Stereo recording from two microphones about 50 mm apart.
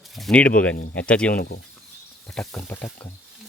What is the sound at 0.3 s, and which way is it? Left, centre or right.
Speech, left.